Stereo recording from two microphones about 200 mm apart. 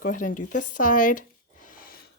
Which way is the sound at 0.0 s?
40° left (ahead or behind).